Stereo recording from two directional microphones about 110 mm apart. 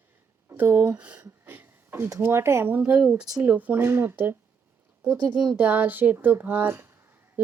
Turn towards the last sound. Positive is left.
turn(degrees=-20)  # may be behind; listen again after turning